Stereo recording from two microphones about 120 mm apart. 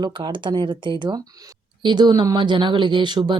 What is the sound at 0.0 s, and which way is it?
Speech, 40° right (ahead or behind).